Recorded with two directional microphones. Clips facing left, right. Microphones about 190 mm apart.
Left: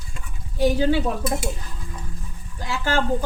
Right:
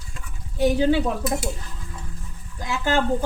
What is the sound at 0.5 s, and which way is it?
Speech, 20° right (ahead or behind).